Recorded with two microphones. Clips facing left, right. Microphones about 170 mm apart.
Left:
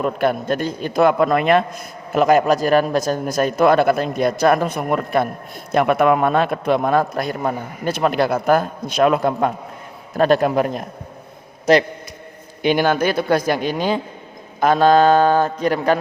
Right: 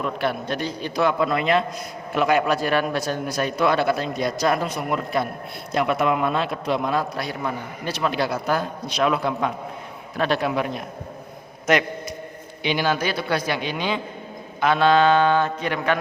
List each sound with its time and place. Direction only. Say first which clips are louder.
0.0 s a man's voice: left 6 dB; 45° left (ahead or behind)
2.1 s a man's voice: left 5 dB; 45° left (ahead or behind)
12.6 s a man's voice: left 6 dB; 50° left (ahead or behind)
14.6 s mantra: left 4 dB; 40° left (ahead or behind)